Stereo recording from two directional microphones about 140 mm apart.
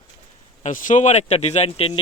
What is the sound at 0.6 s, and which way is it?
Speech, 65° left (ahead or behind).